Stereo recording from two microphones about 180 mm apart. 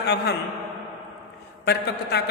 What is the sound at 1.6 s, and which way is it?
Speech, 65° left (ahead or behind).